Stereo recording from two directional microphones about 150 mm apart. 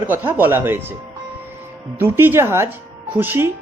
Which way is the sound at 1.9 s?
15° right (ahead or behind).